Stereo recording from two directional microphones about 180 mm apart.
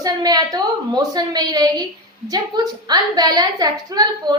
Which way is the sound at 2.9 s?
20° right (ahead or behind).